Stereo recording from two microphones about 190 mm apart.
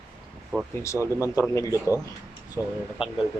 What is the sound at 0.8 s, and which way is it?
Speech, 15° left (ahead or behind).